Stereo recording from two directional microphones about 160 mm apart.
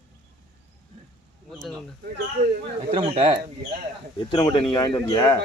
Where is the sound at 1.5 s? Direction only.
Centre (ahead or behind).